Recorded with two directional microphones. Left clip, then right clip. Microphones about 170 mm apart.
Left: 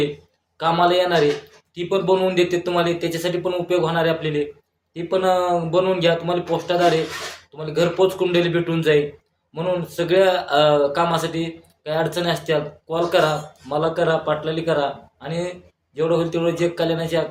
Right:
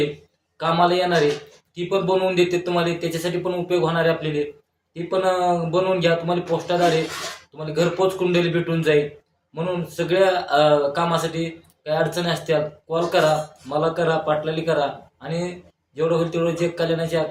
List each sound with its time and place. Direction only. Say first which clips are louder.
0.6 s speech: left 1 dB; 20° left (ahead or behind)